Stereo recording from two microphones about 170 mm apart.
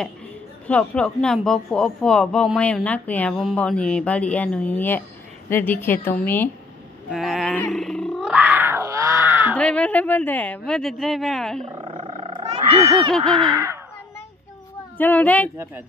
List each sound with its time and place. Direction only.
0.7 s speech: 5° left (ahead or behind)
7.1 s a sound: centre (ahead or behind)
9.6 s speech: 5° left (ahead or behind)
11.6 s roaring cats: 30° right (ahead or behind)
13.1 s speech: 5° left (ahead or behind)
15.0 s speech: 10° left (ahead or behind)
15.5 s speech: 15° right (ahead or behind)